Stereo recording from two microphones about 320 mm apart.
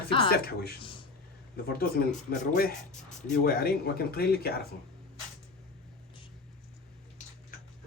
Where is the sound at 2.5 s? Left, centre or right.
Left.